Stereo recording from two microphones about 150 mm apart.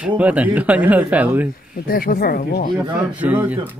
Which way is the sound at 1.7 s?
70° left (ahead or behind).